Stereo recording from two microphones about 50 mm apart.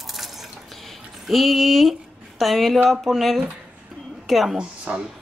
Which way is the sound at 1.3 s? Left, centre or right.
Centre.